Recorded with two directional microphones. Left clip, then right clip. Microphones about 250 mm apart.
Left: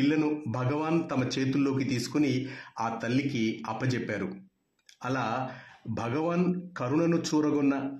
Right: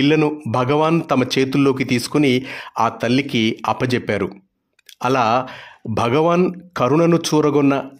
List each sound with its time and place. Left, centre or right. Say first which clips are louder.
0.0 s speech: right 11 dB; right